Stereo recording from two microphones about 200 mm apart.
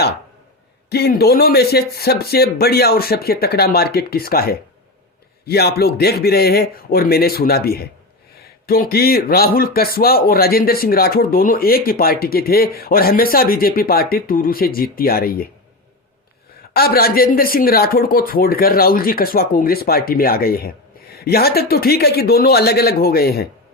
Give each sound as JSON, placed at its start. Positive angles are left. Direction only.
{"t": 0.9, "sound": "speech", "side_deg": 55}
{"t": 16.7, "sound": "speech", "side_deg": 50}